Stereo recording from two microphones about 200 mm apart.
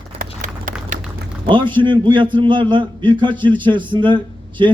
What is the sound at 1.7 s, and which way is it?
A man's voice, 25° right (ahead or behind).